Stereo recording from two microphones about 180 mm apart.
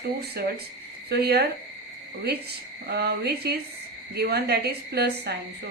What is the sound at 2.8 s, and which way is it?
A woman's voice, 65° right (ahead or behind).